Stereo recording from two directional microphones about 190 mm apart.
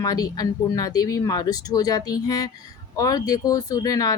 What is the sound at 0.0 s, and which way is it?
Speech, 20° left (ahead or behind).